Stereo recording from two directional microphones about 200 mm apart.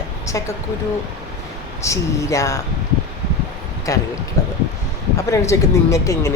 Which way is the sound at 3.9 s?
15° left (ahead or behind).